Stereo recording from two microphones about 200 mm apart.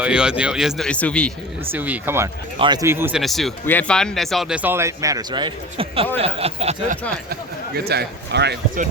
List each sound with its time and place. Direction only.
0.0 s speech: 5° right (ahead or behind)
1.7 s speech: 10° right (ahead or behind)
3.2 s speech: centre (ahead or behind); by 6.1 s 30° right (ahead or behind)
6.1 s a sound: 30° right (ahead or behind)
7.9 s speech: 55° right (ahead or behind)